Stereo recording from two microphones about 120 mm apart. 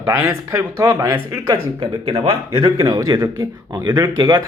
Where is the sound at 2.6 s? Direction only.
30° right (ahead or behind).